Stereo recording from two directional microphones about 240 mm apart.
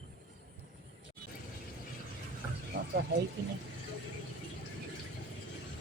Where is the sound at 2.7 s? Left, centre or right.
Right.